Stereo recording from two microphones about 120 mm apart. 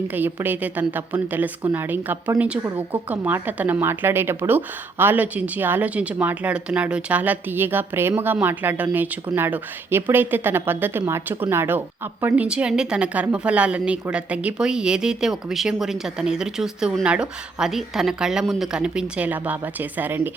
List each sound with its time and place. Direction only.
0.1 s a woman's voice: 15° right (ahead or behind)